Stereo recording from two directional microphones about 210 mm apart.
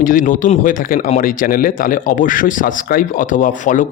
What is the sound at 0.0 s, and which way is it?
A man's voice, 40° left (ahead or behind).